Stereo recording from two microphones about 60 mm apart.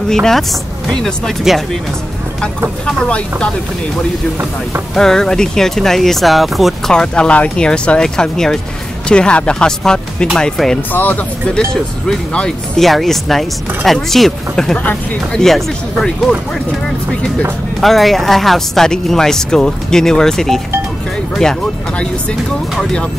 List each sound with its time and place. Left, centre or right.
0.1 s speech: centre
3.1 s speech: centre
4.9 s speech: centre
6.9 s speech: centre
10.9 s speech: left
12.3 s speech: centre
12.7 s speech: centre
17.7 s speech: centre